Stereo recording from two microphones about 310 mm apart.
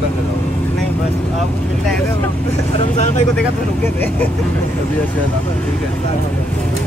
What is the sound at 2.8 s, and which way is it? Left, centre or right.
Speech, left.